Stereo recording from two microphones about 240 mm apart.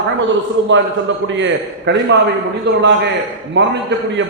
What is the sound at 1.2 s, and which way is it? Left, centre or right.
A man's voice, right.